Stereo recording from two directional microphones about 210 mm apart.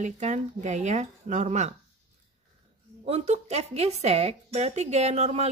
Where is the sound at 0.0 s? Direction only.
35° right (ahead or behind).